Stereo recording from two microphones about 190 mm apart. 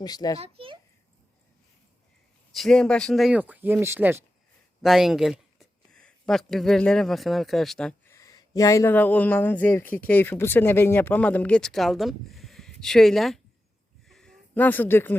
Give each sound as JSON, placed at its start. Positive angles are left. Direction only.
{"t": 0.0, "sound": "a child's voice", "side_deg": 20}
{"t": 0.3, "sound": "a child's voice", "side_deg": -30}
{"t": 2.5, "sound": "speech", "side_deg": 0}
{"t": 4.8, "sound": "speech", "side_deg": 0}
{"t": 14.1, "sound": "a sound", "side_deg": 5}